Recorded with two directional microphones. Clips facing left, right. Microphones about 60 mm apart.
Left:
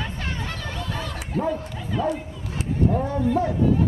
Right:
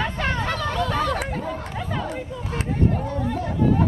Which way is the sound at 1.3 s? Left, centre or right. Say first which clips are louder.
Left 3 dB; right.